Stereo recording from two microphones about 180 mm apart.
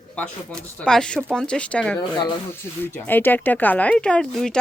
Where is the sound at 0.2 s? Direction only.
5° left (ahead or behind).